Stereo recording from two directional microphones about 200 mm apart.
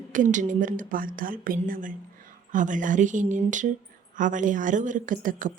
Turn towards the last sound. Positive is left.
turn(degrees=-40)  # may be behind; listen again after turning